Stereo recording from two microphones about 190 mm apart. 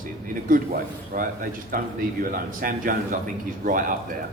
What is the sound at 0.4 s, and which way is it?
A man's voice, 45° right (ahead or behind).